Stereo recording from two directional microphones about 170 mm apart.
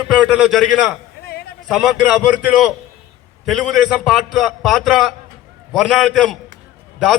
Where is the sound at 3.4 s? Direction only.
Centre (ahead or behind).